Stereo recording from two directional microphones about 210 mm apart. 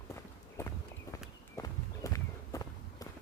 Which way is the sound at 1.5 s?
15° left (ahead or behind).